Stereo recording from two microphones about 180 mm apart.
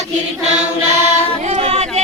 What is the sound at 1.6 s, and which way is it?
Chatter, 35° right (ahead or behind).